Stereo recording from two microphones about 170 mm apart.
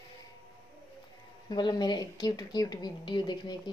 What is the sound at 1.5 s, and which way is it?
Speech, 25° left (ahead or behind).